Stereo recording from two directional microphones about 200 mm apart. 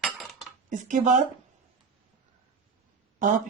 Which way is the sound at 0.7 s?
40° right (ahead or behind).